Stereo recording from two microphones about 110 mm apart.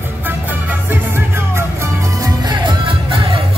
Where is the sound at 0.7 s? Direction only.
20° right (ahead or behind).